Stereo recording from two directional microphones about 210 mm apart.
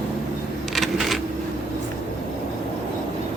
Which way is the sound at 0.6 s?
Centre (ahead or behind).